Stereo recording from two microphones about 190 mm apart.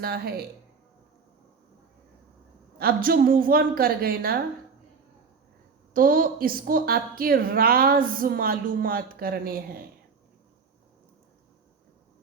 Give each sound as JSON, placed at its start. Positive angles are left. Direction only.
{"t": 0.0, "sound": "a woman's voice", "side_deg": -55}
{"t": 2.7, "sound": "a woman's voice", "side_deg": -50}
{"t": 5.9, "sound": "a woman's voice", "side_deg": -50}